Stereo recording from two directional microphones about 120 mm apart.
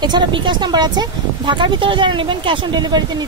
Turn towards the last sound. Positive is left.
turn(degrees=-35)  # may be behind; listen again after turning